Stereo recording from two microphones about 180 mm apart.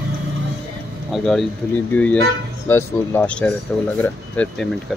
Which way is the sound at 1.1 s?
Centre (ahead or behind).